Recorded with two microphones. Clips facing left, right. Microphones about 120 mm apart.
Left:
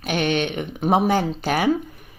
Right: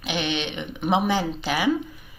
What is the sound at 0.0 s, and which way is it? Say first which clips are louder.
Speech: left 5 dB; 50° left (ahead or behind).